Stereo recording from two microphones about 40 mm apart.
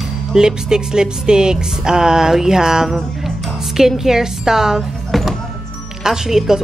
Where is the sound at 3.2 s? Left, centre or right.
Centre.